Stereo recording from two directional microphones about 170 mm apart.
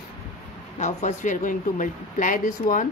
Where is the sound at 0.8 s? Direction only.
45° left (ahead or behind).